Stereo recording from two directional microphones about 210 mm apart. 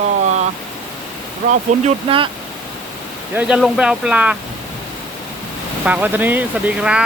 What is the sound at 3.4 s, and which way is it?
Speech, 5° right (ahead or behind).